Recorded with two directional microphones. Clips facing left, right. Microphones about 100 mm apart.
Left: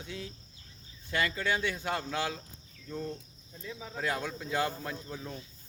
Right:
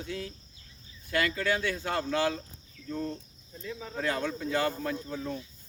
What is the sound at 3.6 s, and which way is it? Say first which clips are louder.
Speech: right 3 dB; 10° left (ahead or behind).